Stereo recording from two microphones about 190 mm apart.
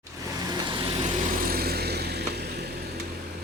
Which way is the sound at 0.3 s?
25° right (ahead or behind).